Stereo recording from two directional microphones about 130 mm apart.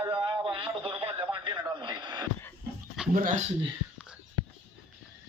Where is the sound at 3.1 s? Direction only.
80° right.